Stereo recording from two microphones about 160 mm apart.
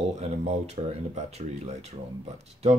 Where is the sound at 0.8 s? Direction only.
40° right (ahead or behind).